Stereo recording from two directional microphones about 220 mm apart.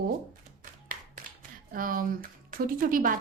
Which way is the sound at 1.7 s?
40° right (ahead or behind).